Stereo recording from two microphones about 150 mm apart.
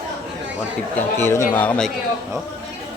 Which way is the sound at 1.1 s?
15° left (ahead or behind).